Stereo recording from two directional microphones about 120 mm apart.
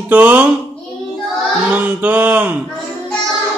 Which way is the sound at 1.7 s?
15° right (ahead or behind).